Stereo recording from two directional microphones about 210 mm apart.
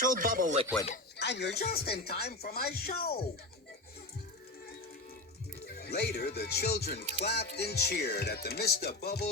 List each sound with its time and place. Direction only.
0.0 s speech: 40° right (ahead or behind)
1.2 s speech: 55° left (ahead or behind)
5.6 s speech: 50° left (ahead or behind)